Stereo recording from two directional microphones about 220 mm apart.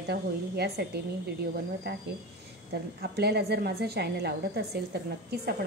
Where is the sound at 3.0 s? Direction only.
45° right (ahead or behind).